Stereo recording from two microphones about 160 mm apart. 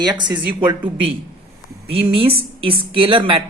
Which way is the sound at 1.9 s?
35° right (ahead or behind).